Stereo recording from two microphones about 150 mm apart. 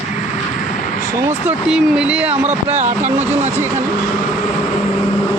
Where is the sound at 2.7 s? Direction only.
50° right (ahead or behind).